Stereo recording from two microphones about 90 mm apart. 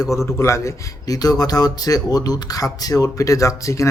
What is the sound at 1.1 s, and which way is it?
Speech, 45° left (ahead or behind).